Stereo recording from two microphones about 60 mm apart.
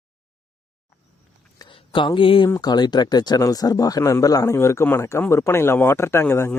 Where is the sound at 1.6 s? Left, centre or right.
Left.